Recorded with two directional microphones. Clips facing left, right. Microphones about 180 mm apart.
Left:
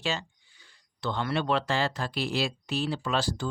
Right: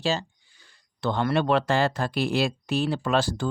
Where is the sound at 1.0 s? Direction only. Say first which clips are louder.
Right 5 dB; 50° right (ahead or behind).